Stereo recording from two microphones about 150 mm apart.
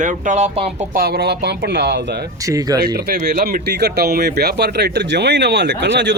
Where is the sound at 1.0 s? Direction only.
90° right.